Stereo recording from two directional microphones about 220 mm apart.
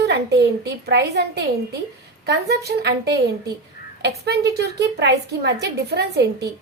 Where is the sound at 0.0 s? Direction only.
50° right (ahead or behind).